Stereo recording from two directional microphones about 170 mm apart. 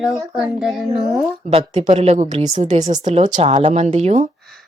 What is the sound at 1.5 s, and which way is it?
Speech, 40° right (ahead or behind).